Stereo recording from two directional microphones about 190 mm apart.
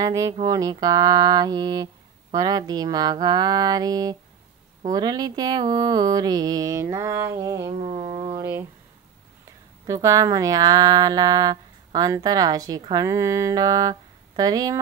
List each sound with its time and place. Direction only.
0.0 s speech: 20° right (ahead or behind)
7.7 s a sound: 35° right (ahead or behind)
8.4 s speech: 10° right (ahead or behind)
10.0 s speech: 20° right (ahead or behind)